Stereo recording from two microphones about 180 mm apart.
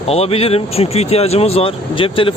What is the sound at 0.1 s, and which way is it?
Speech, 35° left (ahead or behind).